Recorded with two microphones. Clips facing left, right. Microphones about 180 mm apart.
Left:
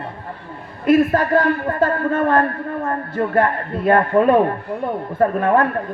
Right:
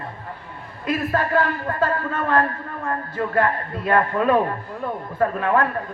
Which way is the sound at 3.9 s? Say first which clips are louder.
Left 5 dB; 30° left (ahead or behind).